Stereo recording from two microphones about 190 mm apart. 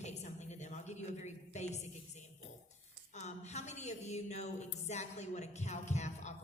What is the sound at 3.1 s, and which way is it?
A man's voice, 35° left (ahead or behind).